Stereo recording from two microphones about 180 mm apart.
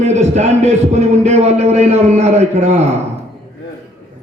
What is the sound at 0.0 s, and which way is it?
A man's voice, 40° right (ahead or behind).